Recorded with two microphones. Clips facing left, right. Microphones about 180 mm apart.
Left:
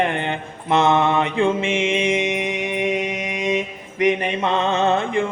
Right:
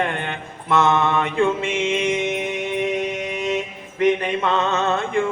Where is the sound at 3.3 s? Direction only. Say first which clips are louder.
Left 1 dB; 15° left (ahead or behind).